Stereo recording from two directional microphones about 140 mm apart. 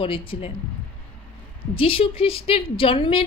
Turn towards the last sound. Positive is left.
turn(degrees=40)  # may be behind; listen again after turning